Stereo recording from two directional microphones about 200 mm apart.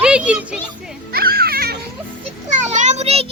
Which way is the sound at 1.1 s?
50° right (ahead or behind).